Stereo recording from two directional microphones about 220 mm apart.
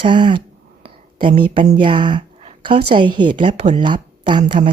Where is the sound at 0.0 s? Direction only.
20° right (ahead or behind).